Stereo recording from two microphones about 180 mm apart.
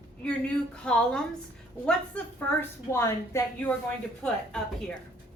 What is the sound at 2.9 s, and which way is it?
A woman's voice, 15° left (ahead or behind).